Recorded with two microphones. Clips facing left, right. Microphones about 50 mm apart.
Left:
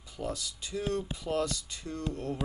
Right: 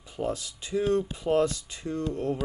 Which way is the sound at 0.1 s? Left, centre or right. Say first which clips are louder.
Right 5 dB; right.